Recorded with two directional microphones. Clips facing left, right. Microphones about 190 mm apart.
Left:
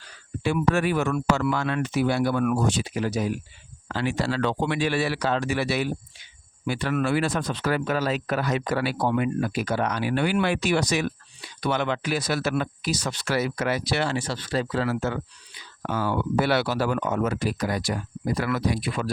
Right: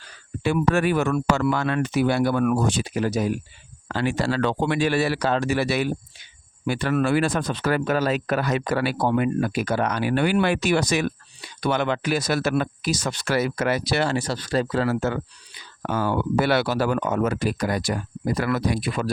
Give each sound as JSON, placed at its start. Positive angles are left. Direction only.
{"t": 0.4, "sound": "speech", "side_deg": -50}
{"t": 2.4, "sound": "speech", "side_deg": -45}